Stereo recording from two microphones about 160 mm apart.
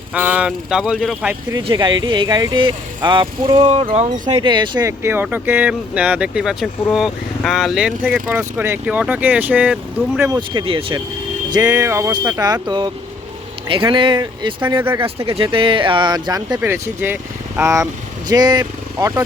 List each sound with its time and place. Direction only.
0.1 s speech: 5° right (ahead or behind)
1.5 s speech: 30° right (ahead or behind)
3.7 s speech: 40° right (ahead or behind)
4.3 s speech: 30° right (ahead or behind); by 10.4 s 15° right (ahead or behind)
10.5 s speech: 30° right (ahead or behind)
11.5 s speech: 20° right (ahead or behind)
16.6 s speech: 15° right (ahead or behind)